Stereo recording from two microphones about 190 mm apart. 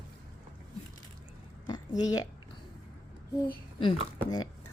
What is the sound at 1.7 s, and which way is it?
Speech, 20° left (ahead or behind).